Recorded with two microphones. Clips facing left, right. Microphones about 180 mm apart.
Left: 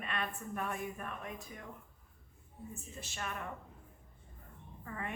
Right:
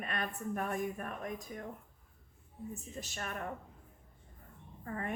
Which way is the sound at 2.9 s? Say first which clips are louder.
Left 1 dB; 40° right (ahead or behind).